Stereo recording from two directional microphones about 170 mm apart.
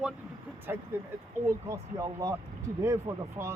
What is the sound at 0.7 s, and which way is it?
Speech, 15° right (ahead or behind).